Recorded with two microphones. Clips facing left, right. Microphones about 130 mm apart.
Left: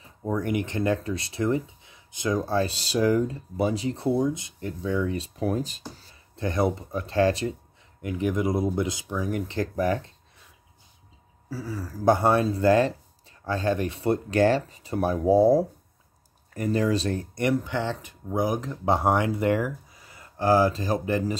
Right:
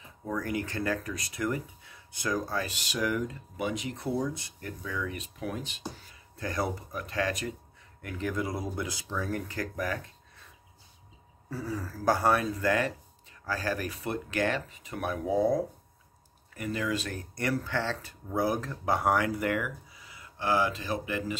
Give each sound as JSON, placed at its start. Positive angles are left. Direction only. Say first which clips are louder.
{"t": 0.0, "sound": "speech", "louder": "left 6 dB", "side_deg": 30}
{"t": 11.4, "sound": "speech", "louder": "left 1 dB", "side_deg": 0}
{"t": 11.9, "sound": "speech", "louder": "left 5 dB", "side_deg": 20}
{"t": 19.9, "sound": "speech", "louder": "left 1 dB", "side_deg": 45}